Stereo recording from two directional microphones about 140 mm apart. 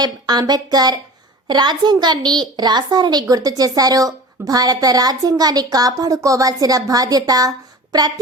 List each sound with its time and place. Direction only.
0.0 s a woman's voice: 30° right (ahead or behind)